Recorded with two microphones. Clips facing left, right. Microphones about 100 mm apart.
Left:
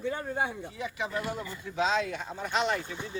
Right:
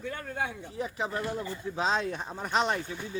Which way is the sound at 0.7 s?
40° right (ahead or behind).